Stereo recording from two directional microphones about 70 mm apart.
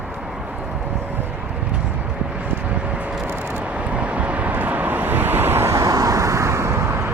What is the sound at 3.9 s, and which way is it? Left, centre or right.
Vehicle, centre.